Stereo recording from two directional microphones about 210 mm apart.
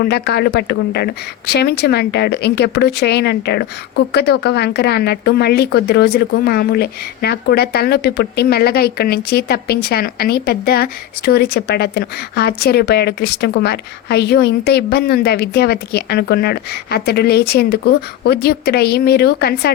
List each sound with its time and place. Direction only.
0.0 s speech: 50° left (ahead or behind)